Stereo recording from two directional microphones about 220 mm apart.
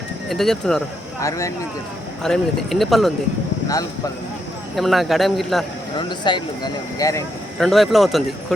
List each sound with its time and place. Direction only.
0.3 s speech: centre (ahead or behind)
1.2 s speech: 15° left (ahead or behind)
2.2 s speech: centre (ahead or behind)
4.8 s speech: centre (ahead or behind)
6.0 s speech: 20° left (ahead or behind)
7.6 s speech: centre (ahead or behind)